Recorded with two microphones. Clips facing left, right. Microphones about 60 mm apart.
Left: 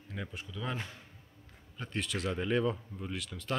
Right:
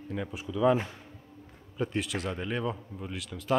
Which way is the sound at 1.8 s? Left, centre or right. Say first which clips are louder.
Right 5 dB; centre.